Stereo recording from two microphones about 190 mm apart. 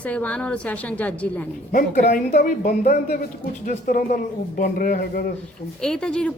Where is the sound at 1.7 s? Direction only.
50° left (ahead or behind).